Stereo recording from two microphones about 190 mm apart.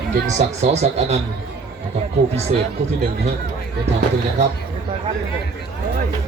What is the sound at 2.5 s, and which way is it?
Speech, 35° right (ahead or behind).